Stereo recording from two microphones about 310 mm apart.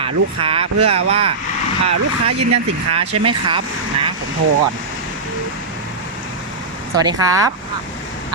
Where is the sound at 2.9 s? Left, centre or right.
Centre.